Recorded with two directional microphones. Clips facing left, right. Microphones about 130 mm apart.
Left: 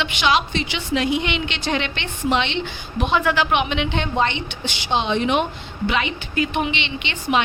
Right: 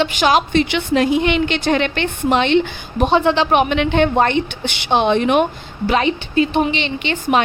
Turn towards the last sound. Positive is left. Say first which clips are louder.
# right 5 dB
turn(degrees=-45)  # may be behind; listen again after turning